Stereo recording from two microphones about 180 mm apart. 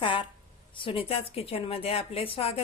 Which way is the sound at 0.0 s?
25° left (ahead or behind).